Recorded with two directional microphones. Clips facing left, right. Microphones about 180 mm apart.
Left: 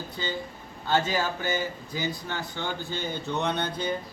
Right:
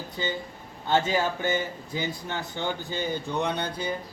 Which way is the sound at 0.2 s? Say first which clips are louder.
Right 2 dB; 20° right (ahead or behind).